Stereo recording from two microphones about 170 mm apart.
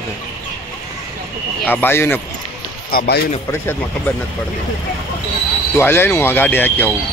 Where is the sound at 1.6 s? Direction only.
10° left (ahead or behind).